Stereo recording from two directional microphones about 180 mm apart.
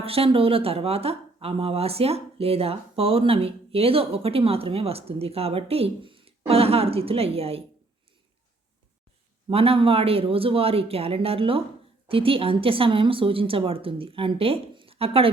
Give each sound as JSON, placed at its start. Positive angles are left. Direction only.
{"t": 0.0, "sound": "speech", "side_deg": -30}
{"t": 9.5, "sound": "speech", "side_deg": -30}